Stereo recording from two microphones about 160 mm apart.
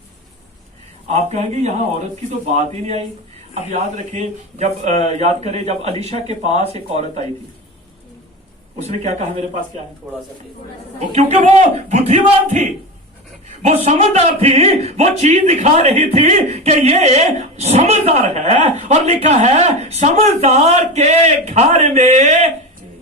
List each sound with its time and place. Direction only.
1.0 s a man's voice: 45° right (ahead or behind)
8.8 s a man's voice: 45° right (ahead or behind)
10.0 s speech: centre (ahead or behind)
11.1 s a man's voice: 45° right (ahead or behind)